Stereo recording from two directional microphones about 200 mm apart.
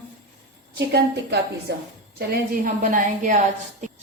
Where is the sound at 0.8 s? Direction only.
55° right (ahead or behind).